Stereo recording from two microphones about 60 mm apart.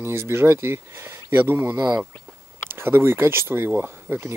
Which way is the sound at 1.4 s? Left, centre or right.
Right.